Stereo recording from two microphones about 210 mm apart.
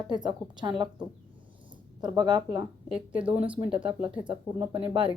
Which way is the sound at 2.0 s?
20° right (ahead or behind).